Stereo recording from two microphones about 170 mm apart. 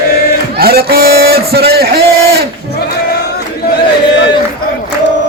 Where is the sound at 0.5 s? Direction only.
65° right (ahead or behind).